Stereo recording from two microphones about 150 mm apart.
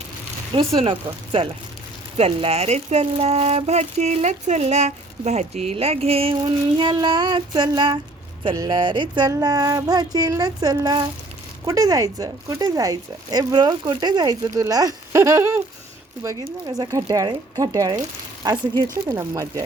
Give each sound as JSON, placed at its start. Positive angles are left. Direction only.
{"t": 0.5, "sound": "speech", "side_deg": -40}
{"t": 16.4, "sound": "speech", "side_deg": -30}
{"t": 19.0, "sound": "speech", "side_deg": -20}